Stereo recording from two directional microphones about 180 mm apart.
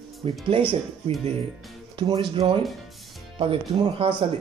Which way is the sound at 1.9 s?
30° right (ahead or behind).